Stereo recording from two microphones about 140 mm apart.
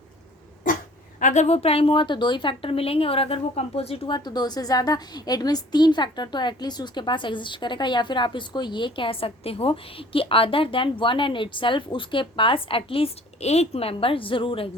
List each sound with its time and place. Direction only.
1.2 s a woman's voice: 60° left (ahead or behind); by 14.7 s 40° left (ahead or behind)